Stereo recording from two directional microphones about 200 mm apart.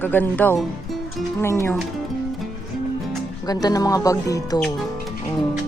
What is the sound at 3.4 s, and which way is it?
Speech, 20° left (ahead or behind).